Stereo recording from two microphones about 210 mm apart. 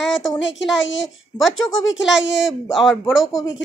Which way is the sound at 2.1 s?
60° left (ahead or behind).